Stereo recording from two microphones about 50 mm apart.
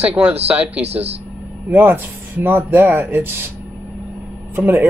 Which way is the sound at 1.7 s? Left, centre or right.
Right.